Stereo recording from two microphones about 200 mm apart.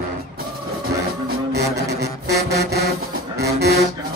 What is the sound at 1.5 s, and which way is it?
Music, 55° right (ahead or behind).